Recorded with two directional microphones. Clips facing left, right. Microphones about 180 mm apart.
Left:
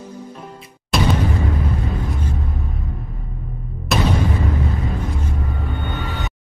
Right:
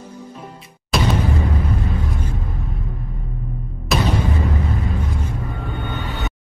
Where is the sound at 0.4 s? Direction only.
Centre (ahead or behind).